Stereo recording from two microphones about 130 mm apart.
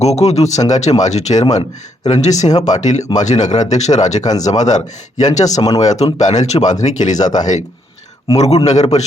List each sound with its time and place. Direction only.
0.0 s a man's voice: 55° left (ahead or behind)
5.5 s speech: 30° left (ahead or behind)
5.8 s a man's voice: 60° left (ahead or behind)
8.4 s a man's voice: 55° left (ahead or behind)